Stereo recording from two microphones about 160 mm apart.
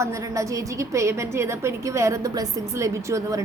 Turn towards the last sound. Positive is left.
turn(degrees=-20)  # may be behind; listen again after turning